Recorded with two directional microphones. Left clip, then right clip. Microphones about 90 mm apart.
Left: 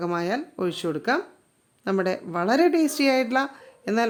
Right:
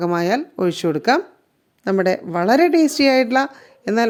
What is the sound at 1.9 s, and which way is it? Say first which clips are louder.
A woman's voice: right 7 dB; 35° right (ahead or behind).